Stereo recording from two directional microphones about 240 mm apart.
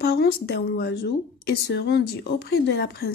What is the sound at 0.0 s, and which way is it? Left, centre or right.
Speech, left.